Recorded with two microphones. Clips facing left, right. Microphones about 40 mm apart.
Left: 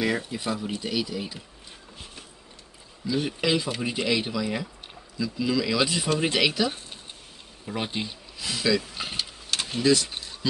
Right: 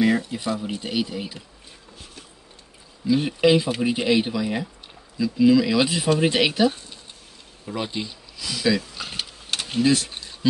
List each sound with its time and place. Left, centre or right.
0.0 s speech: centre
0.7 s speech: right
3.1 s speech: centre
7.6 s speech: centre
9.0 s speech: centre
9.7 s speech: right